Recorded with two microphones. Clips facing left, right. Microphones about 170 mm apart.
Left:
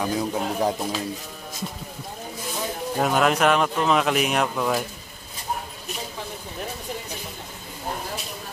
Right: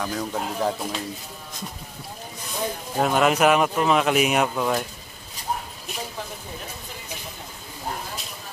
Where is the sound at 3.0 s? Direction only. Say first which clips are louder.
Right 1 dB; centre (ahead or behind).